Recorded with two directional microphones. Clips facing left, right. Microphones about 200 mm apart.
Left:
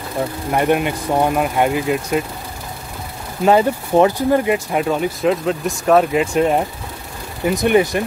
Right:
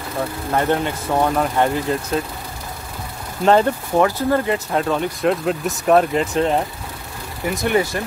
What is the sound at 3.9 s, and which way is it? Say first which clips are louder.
Speech: left 4 dB; 20° left (ahead or behind).